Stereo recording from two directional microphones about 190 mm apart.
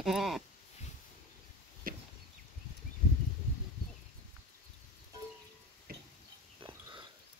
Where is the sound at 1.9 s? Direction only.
50° right (ahead or behind).